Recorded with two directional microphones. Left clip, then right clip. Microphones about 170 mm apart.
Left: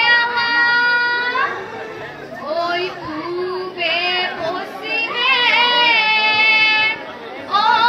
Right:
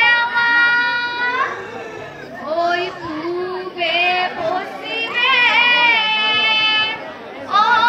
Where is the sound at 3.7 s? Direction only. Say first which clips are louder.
Right 2 dB; 20° left (ahead or behind).